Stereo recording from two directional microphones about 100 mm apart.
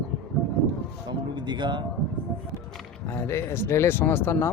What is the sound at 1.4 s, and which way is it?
Speech, 50° right (ahead or behind).